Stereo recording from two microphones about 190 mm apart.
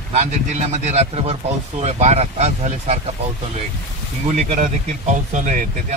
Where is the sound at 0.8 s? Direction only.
35° right (ahead or behind).